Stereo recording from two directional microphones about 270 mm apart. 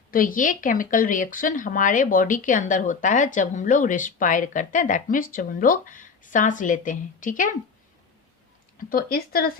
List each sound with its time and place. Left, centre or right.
0.1 s speech: left
8.9 s speech: left